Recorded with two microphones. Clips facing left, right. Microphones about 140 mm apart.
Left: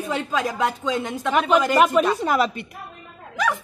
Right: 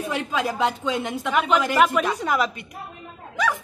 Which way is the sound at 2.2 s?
25° left (ahead or behind).